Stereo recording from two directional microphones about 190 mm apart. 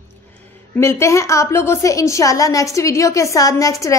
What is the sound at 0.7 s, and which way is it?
A woman's voice, 15° left (ahead or behind).